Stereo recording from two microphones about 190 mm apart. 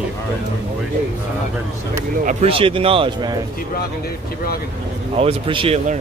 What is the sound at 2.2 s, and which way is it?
Speech, 30° right (ahead or behind).